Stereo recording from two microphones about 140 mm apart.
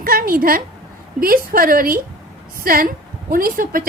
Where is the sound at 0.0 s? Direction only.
90° right.